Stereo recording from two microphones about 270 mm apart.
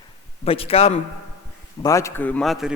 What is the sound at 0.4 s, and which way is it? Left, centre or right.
Speech, left.